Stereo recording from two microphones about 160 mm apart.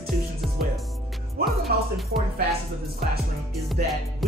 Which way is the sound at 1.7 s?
75° right (ahead or behind).